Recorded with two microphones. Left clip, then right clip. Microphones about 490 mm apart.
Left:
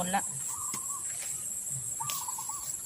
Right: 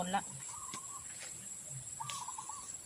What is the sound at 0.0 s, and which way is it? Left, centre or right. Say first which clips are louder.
Chicken: left 5 dB; right.